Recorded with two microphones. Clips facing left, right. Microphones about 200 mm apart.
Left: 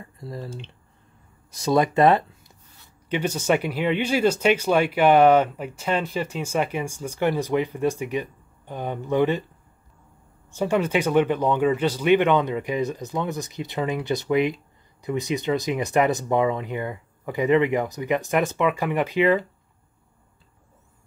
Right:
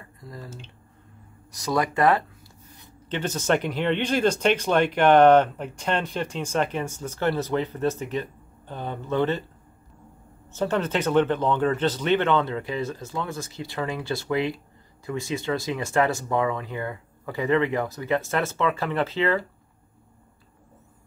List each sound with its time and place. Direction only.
0.2 s speech: 25° left (ahead or behind)
1.5 s speech: 25° left (ahead or behind)
3.1 s speech: 10° left (ahead or behind)
10.5 s speech: 10° left (ahead or behind)